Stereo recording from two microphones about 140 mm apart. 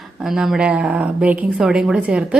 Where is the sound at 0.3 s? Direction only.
5° right (ahead or behind).